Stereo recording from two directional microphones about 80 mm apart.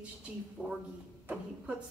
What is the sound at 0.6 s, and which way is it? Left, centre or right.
Speech, centre.